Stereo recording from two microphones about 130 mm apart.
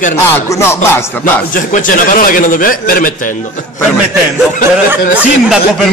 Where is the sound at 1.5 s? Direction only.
90° left.